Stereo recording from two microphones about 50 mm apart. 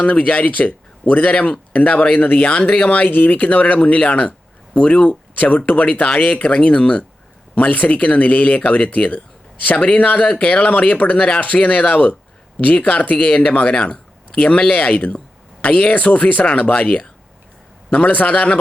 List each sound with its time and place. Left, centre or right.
0.0 s speech: left